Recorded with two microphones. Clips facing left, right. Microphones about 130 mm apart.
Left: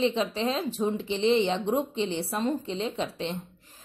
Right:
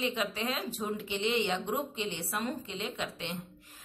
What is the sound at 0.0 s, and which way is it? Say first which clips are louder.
A woman's voice: left 7 dB; 30° left (ahead or behind).